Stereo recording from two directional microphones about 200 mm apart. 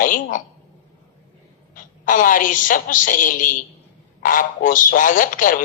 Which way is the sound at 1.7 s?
45° left (ahead or behind).